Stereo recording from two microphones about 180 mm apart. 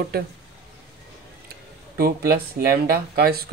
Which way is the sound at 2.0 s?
60° right (ahead or behind).